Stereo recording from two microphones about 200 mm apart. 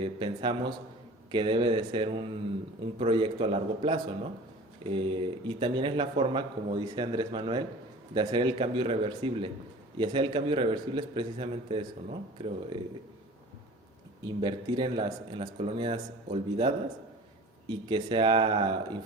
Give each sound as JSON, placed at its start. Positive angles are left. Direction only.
{"t": 0.0, "sound": "speech", "side_deg": -25}
{"t": 14.3, "sound": "speech", "side_deg": -25}